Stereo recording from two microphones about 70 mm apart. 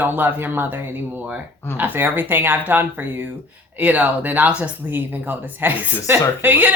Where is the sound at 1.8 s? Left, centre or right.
Right.